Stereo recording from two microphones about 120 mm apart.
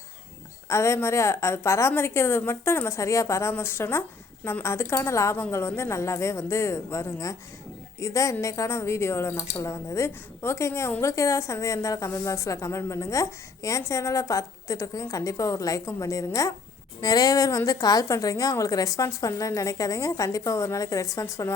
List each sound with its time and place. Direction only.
0.7 s a woman's voice: 20° left (ahead or behind)